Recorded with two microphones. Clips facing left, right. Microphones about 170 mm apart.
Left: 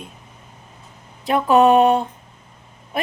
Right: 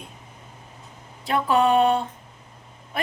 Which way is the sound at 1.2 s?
20° left (ahead or behind).